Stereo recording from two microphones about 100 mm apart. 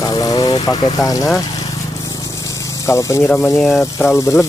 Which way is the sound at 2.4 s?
30° left (ahead or behind).